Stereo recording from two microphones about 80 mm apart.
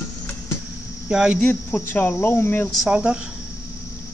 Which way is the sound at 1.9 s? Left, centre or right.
Left.